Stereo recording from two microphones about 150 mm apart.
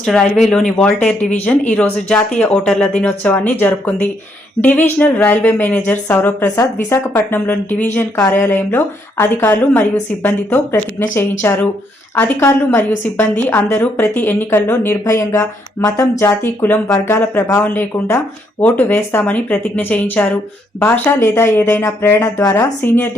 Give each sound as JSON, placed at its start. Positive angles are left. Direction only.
{"t": 0.0, "sound": "speech", "side_deg": 0}